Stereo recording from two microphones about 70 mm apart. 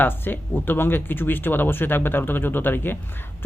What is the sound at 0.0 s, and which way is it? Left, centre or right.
Speech, left.